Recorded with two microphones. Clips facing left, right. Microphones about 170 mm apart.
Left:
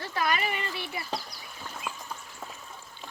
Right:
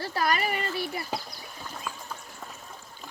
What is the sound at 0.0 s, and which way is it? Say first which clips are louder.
Speech: right 2 dB; 35° right (ahead or behind).